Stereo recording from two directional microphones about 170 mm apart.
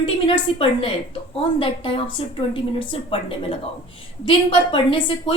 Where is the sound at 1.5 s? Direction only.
30° left (ahead or behind).